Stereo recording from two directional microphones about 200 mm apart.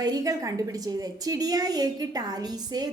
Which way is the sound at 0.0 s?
20° right (ahead or behind).